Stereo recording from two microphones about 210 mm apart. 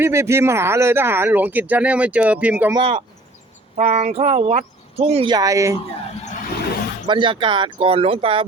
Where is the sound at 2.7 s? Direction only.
25° right (ahead or behind).